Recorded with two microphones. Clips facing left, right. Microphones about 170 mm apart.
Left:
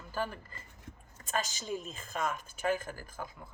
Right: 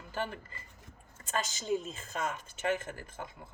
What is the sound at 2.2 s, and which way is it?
Speech, 25° right (ahead or behind).